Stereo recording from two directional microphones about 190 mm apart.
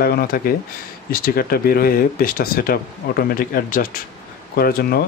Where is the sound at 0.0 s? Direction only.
55° left (ahead or behind).